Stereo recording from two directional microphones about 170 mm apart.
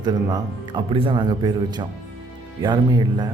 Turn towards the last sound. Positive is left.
turn(degrees=-25)  # may be behind; listen again after turning